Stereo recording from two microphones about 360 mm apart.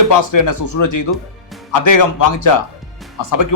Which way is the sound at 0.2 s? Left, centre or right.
Left.